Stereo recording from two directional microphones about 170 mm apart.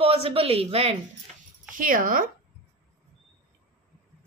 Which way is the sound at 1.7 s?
50° right (ahead or behind).